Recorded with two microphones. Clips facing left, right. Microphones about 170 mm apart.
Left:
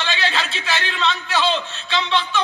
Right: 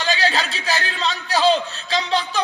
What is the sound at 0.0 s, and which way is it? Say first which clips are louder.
A man's voice: right 2 dB; 40° right (ahead or behind).